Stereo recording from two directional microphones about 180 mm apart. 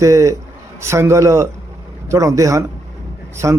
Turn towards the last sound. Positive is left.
turn(degrees=-15)  # may be behind; listen again after turning